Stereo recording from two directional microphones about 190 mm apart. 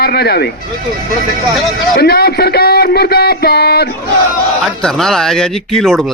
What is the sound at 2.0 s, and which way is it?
A man's voice, 55° left (ahead or behind).